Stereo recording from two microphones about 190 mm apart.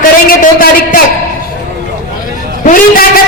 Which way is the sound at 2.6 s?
50° left (ahead or behind).